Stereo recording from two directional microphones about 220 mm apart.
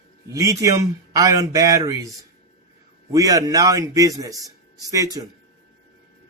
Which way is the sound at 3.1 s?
15° right (ahead or behind).